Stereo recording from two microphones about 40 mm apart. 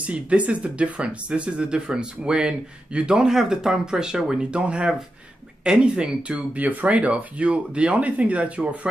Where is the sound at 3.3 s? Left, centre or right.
Centre; by 6.6 s right.